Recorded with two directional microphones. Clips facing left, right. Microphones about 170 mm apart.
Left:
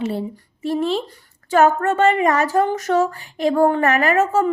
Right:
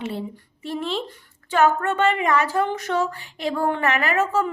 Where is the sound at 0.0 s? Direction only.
40° left (ahead or behind).